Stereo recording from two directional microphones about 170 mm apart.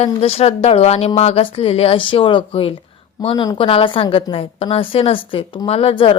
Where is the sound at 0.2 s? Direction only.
35° left (ahead or behind).